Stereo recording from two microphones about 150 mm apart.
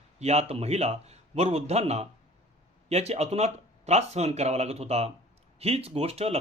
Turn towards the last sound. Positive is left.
turn(degrees=-45)  # may be behind; listen again after turning